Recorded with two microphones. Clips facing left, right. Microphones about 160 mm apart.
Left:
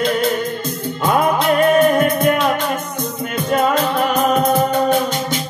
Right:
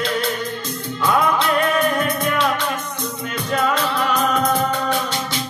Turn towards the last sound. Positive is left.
turn(degrees=45)  # may be behind; listen again after turning